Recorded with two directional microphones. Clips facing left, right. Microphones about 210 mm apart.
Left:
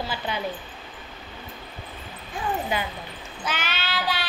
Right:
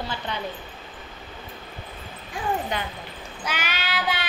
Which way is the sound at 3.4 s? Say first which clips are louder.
Even; 10° right (ahead or behind).